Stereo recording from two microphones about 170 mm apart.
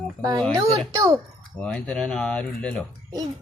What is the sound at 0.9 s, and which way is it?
Child singing, 20° right (ahead or behind).